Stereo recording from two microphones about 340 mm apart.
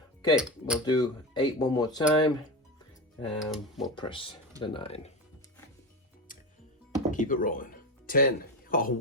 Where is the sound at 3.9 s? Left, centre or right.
Centre.